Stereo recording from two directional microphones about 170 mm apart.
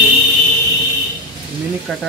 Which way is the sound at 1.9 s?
Centre (ahead or behind).